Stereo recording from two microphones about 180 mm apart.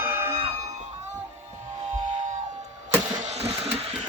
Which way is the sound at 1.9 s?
30° right (ahead or behind).